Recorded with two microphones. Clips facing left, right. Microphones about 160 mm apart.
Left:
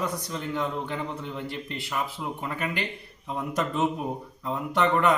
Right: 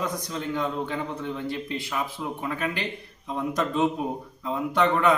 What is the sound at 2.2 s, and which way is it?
Speech, 10° left (ahead or behind).